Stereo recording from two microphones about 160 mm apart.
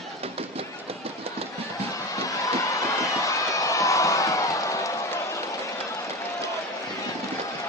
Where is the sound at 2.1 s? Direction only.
20° left (ahead or behind).